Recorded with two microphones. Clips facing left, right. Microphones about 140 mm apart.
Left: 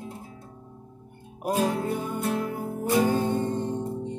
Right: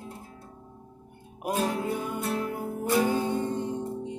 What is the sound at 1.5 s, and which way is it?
Music, 10° left (ahead or behind).